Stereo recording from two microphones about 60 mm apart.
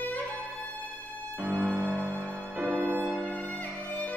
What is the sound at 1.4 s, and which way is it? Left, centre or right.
Music, right.